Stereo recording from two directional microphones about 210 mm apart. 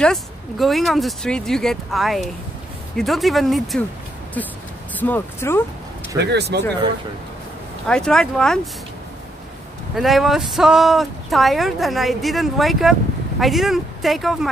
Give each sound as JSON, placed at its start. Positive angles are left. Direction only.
{"t": 0.0, "sound": "speech", "side_deg": 0}
{"t": 4.9, "sound": "speech", "side_deg": 10}
{"t": 6.1, "sound": "speech", "side_deg": -50}
{"t": 7.8, "sound": "speech", "side_deg": 5}
{"t": 9.9, "sound": "speech", "side_deg": 0}